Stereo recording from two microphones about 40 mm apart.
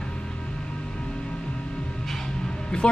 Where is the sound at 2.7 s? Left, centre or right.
Left.